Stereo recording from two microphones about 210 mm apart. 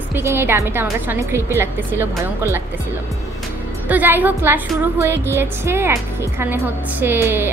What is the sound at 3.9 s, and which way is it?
A woman's voice, 10° right (ahead or behind).